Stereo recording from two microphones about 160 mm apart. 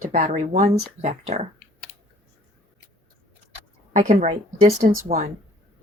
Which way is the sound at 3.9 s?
50° right (ahead or behind).